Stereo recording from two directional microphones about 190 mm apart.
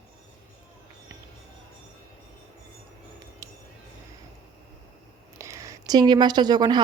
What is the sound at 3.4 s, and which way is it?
Music, 15° right (ahead or behind).